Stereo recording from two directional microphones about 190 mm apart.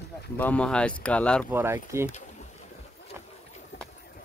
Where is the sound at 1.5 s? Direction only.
15° right (ahead or behind).